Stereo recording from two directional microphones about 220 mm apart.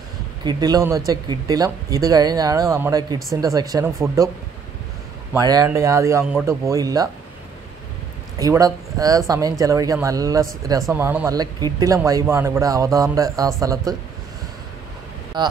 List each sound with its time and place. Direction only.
0.5 s speech: 15° right (ahead or behind)
5.3 s speech: 15° right (ahead or behind)
8.4 s speech: 15° right (ahead or behind)
15.3 s speech: 20° right (ahead or behind)